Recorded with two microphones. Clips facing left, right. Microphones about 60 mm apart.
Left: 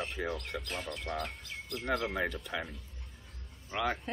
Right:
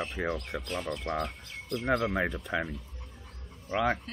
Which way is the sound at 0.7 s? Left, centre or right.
Right.